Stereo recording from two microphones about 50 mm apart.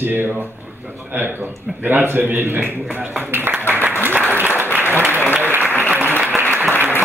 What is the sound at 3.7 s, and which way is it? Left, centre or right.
Applause, right.